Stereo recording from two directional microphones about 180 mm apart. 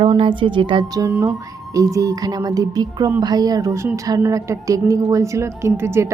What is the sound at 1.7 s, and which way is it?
A woman's voice, 15° right (ahead or behind).